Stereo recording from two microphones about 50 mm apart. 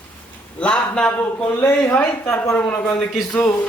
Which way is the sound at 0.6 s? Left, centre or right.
Centre.